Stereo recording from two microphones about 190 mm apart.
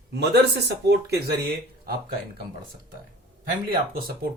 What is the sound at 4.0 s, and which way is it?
Speech, 50° right (ahead or behind).